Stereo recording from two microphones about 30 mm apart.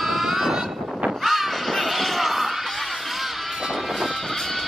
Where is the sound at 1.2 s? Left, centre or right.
Centre.